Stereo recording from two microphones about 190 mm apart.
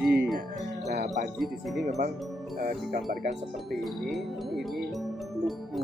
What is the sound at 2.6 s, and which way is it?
Speech, 50° right (ahead or behind).